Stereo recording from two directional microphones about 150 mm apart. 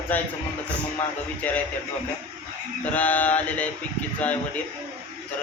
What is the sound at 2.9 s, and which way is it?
Speech, 10° left (ahead or behind).